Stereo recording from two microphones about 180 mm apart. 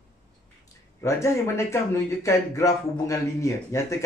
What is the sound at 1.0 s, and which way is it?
Speech, 15° left (ahead or behind).